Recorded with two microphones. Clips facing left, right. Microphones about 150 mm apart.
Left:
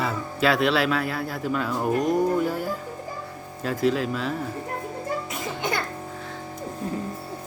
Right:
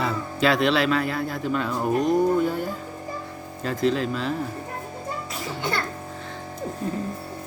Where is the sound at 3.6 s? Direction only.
5° left (ahead or behind).